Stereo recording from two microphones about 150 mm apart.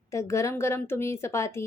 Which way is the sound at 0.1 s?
20° left (ahead or behind).